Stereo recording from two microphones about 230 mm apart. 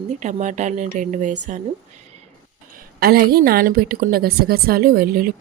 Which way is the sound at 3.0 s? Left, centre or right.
Right.